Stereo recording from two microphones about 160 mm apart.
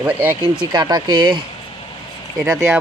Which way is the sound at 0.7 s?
25° right (ahead or behind).